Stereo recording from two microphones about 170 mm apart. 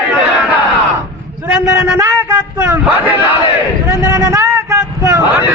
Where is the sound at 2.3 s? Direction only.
10° right (ahead or behind).